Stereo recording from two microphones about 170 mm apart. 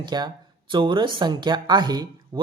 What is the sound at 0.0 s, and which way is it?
Speech, 25° right (ahead or behind).